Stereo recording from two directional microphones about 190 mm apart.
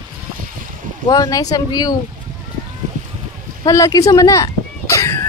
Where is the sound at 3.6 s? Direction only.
15° left (ahead or behind).